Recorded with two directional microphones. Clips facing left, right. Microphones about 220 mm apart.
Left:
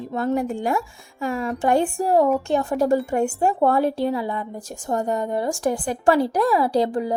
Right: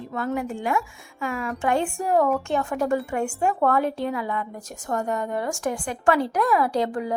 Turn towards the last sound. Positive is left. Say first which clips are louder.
# left 3 dB
turn(degrees=35)  # may be behind; listen again after turning